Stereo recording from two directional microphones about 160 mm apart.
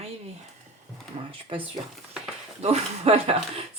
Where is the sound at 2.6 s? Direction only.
40° right (ahead or behind).